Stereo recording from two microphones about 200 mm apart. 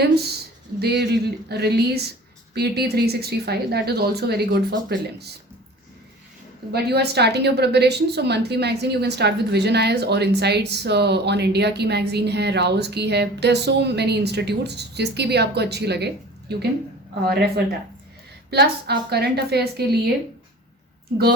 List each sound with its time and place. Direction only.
0.0 s a woman's voice: 55° right (ahead or behind)
6.7 s a woman's voice: 55° right (ahead or behind)